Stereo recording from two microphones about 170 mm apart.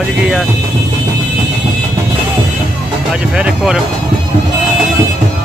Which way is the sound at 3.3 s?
5° right (ahead or behind).